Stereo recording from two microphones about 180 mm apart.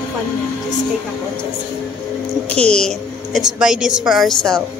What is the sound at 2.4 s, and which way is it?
A woman's voice, 5° left (ahead or behind).